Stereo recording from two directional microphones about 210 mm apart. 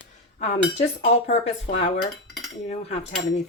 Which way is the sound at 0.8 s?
30° left (ahead or behind).